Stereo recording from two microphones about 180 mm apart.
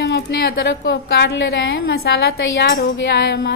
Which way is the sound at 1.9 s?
65° left (ahead or behind).